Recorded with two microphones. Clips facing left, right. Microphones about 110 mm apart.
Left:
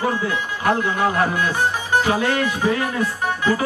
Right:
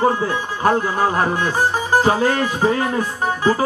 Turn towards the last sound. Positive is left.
turn(degrees=-30)  # may be behind; listen again after turning